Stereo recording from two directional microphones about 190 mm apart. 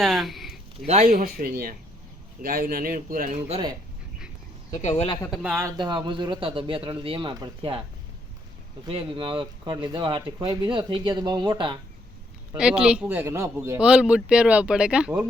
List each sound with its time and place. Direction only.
0.0 s a sound: centre (ahead or behind)
1.4 s speech: 50° right (ahead or behind)
3.5 s speech: 20° right (ahead or behind)
5.0 s speech: 25° left (ahead or behind)
5.3 s speech: 5° right (ahead or behind); by 7.8 s 25° right (ahead or behind)
8.9 s speech: 25° right (ahead or behind)
12.5 s speech: 5° right (ahead or behind)